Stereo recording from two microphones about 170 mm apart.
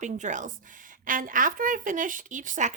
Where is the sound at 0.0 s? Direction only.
45° right (ahead or behind).